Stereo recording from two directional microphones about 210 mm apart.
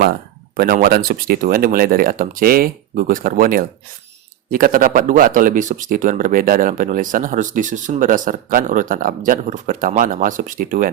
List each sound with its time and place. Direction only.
0.0 s speech: 45° right (ahead or behind)